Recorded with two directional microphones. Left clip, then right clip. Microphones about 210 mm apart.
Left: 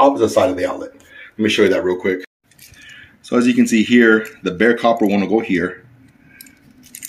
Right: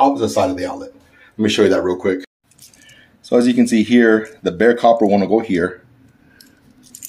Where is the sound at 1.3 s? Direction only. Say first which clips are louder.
Even; 15° right (ahead or behind).